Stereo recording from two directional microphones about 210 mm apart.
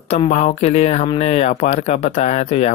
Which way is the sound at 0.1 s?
35° left (ahead or behind).